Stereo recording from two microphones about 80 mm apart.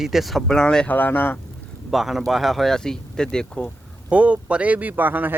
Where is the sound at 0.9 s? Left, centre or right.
Left.